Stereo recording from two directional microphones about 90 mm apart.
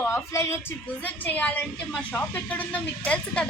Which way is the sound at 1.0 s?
20° left (ahead or behind).